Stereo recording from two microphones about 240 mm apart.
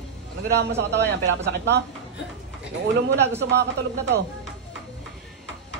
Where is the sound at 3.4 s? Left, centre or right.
Right.